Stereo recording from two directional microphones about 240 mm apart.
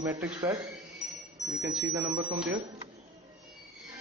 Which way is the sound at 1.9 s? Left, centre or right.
Centre.